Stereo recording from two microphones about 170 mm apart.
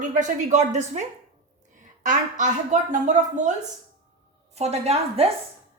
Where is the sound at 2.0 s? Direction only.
50° right (ahead or behind).